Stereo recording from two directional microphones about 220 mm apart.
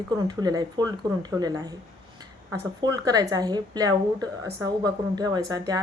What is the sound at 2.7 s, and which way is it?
A woman's voice, 15° right (ahead or behind).